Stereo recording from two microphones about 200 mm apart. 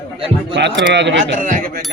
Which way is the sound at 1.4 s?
45° right (ahead or behind).